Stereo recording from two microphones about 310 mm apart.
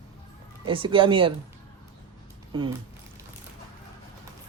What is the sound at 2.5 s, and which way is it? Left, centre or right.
Speech, centre.